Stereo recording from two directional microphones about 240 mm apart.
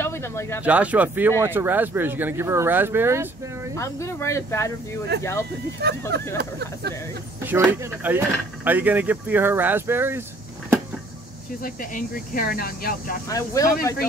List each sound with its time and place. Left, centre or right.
0.0 s speech: centre
0.7 s speech: centre
3.7 s speech: centre
5.1 s speech: right
7.4 s speech: centre
11.6 s speech: left
13.3 s speech: centre